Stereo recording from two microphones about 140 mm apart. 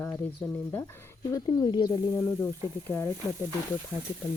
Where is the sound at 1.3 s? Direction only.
30° left (ahead or behind).